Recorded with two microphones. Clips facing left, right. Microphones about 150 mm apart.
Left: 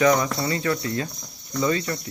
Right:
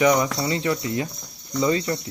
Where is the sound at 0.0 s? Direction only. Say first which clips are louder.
Right 1 dB; 15° right (ahead or behind).